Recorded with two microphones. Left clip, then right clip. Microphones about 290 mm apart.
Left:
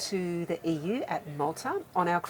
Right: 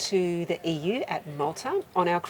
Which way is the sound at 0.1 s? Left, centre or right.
Right.